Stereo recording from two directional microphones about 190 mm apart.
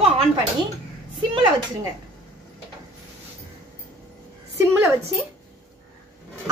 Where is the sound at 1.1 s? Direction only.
25° right (ahead or behind).